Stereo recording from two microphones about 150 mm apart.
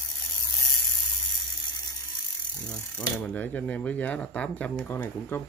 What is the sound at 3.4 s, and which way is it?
Speech, 10° left (ahead or behind).